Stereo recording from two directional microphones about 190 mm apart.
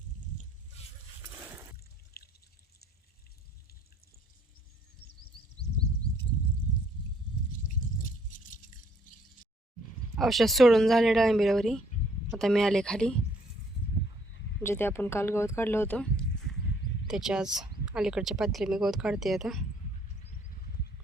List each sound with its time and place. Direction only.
2.2 s water: 55° left (ahead or behind)
7.5 s drip: 45° left (ahead or behind)
10.2 s speech: centre (ahead or behind)
14.6 s speech: 10° left (ahead or behind)